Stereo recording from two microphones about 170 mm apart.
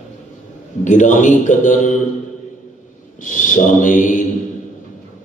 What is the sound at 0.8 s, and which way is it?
A man's voice, 45° left (ahead or behind).